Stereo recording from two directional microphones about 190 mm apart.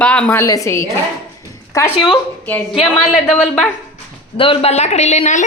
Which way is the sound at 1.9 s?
25° left (ahead or behind).